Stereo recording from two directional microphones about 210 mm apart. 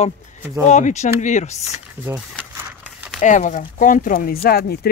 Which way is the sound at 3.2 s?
35° left (ahead or behind).